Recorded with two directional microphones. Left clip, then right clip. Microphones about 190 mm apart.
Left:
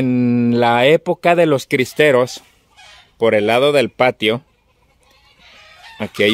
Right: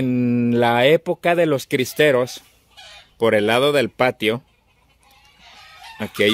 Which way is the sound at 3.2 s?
5° left (ahead or behind).